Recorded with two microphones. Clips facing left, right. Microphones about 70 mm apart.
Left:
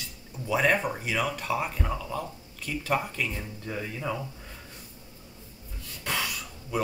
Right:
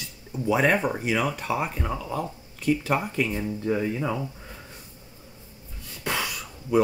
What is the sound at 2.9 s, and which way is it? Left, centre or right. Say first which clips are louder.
Speech: right 3 dB; right.